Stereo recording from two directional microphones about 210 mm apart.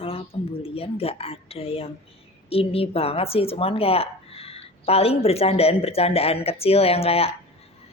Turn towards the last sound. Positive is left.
turn(degrees=30)  # may be behind; listen again after turning